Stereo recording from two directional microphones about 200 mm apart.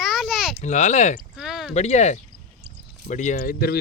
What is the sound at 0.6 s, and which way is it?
Speech, 35° left (ahead or behind).